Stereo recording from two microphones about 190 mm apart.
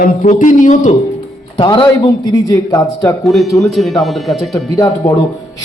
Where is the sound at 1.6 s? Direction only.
25° left (ahead or behind).